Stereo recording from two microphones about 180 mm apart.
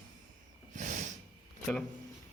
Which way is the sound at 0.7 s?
45° right (ahead or behind).